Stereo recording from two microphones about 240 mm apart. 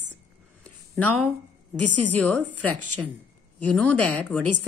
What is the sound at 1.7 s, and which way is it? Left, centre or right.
A woman's voice, right.